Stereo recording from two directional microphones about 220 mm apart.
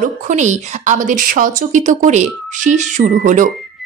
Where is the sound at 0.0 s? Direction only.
35° right (ahead or behind).